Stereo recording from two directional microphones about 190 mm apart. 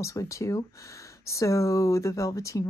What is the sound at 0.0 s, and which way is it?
Speech, 15° left (ahead or behind).